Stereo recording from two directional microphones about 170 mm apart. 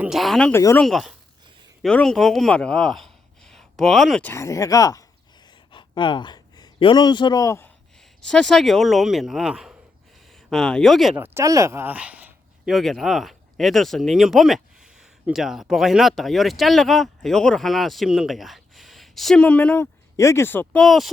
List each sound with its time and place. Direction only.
0.0 s speech: centre (ahead or behind); by 5.0 s 20° left (ahead or behind)
5.5 s a sound: 25° left (ahead or behind)
8.2 s speech: 5° left (ahead or behind)
11.2 s speech: 20° right (ahead or behind); by 20.8 s 10° left (ahead or behind)
20.8 s speech: centre (ahead or behind)